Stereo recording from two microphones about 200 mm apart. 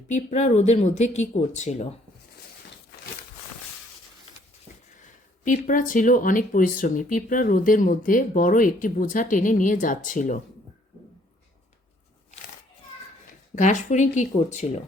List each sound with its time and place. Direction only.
0.1 s speech: 35° left (ahead or behind)
5.5 s speech: 40° left (ahead or behind)
13.6 s speech: 35° left (ahead or behind)